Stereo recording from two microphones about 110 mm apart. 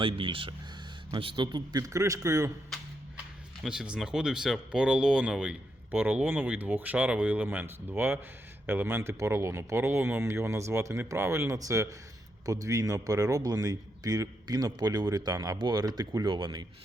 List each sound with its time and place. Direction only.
0.0 s speech: 50° right (ahead or behind); by 2.5 s 25° right (ahead or behind)
3.6 s speech: 5° right (ahead or behind); by 16.6 s 40° right (ahead or behind)